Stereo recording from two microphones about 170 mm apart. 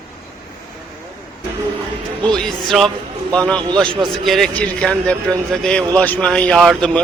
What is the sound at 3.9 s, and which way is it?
Speech, 30° right (ahead or behind).